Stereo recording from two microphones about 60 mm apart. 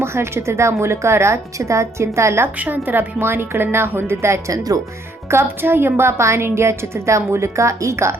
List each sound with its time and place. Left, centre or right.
0.0 s a woman's voice: right
2.6 s a woman's voice: right
4.5 s speech: right
5.3 s a woman's voice: right